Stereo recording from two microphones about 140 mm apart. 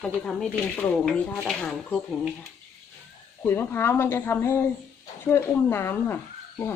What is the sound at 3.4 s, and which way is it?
A woman's voice, 15° left (ahead or behind).